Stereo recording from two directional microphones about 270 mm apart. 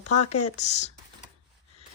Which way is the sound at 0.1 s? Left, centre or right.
Left.